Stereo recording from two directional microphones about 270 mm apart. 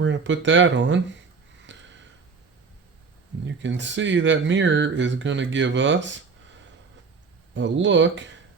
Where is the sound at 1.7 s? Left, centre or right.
Right.